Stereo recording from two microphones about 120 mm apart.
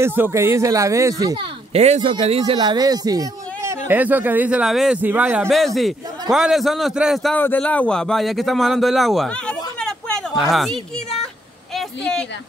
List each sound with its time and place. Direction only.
0.0 s speech: 20° right (ahead or behind)
1.7 s speech: 65° right (ahead or behind)
2.2 s speech: 55° right (ahead or behind); by 3.7 s 30° right (ahead or behind)
3.8 s speech: 15° right (ahead or behind)
5.5 s a man's voice: centre (ahead or behind)
7.3 s a man's voice: 15° left (ahead or behind)
11.7 s a sound: 5° left (ahead or behind)